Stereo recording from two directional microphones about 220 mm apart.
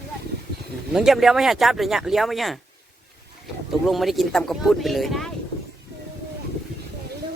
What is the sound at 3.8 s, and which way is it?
Speech, centre (ahead or behind).